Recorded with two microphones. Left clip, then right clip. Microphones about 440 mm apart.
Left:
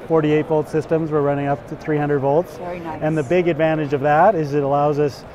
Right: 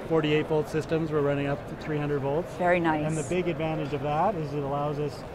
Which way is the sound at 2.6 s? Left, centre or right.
Right.